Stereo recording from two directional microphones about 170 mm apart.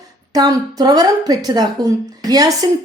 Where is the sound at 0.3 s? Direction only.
20° right (ahead or behind).